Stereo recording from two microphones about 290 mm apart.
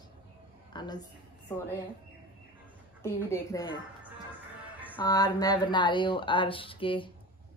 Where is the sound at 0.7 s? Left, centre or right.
Centre.